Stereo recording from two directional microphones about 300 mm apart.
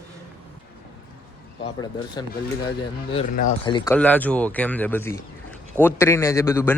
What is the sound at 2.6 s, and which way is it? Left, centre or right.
A man's voice, centre.